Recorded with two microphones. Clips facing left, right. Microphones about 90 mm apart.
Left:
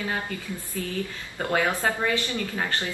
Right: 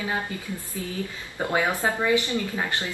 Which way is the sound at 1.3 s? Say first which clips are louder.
Even; 15° right (ahead or behind).